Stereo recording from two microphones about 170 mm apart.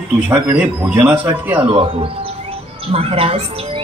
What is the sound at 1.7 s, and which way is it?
Speech, 30° right (ahead or behind).